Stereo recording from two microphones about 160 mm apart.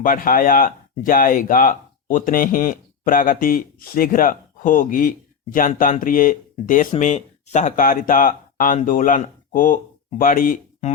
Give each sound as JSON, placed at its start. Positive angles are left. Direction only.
{"t": 0.0, "sound": "speech", "side_deg": 60}
{"t": 7.0, "sound": "speech", "side_deg": 45}